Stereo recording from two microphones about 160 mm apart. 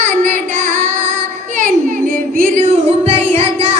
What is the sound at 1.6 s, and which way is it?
Music, 55° right (ahead or behind).